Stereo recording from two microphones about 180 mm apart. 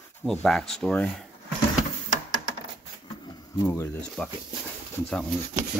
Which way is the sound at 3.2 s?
15° left (ahead or behind).